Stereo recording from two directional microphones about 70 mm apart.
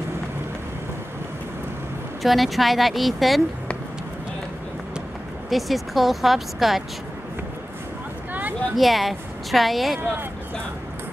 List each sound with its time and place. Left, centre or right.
2.2 s speech: centre
5.5 s speech: centre
8.3 s a sound: right
8.7 s speech: centre